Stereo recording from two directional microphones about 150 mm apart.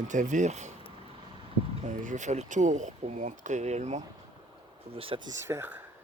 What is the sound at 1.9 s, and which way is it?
Speech, 55° right (ahead or behind).